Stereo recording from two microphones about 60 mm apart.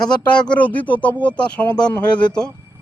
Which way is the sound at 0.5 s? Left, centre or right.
Left.